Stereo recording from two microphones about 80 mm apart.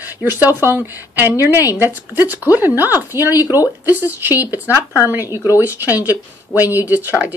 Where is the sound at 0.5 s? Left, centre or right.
Right.